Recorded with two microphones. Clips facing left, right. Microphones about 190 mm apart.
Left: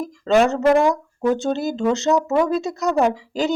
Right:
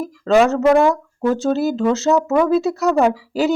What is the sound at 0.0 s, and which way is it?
Speech, centre (ahead or behind).